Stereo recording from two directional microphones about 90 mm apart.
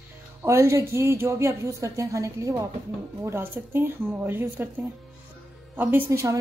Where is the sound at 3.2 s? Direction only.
25° right (ahead or behind).